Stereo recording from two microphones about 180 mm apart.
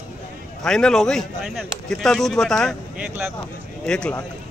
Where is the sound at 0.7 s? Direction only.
5° left (ahead or behind).